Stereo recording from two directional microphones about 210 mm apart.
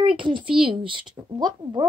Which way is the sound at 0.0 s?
25° right (ahead or behind).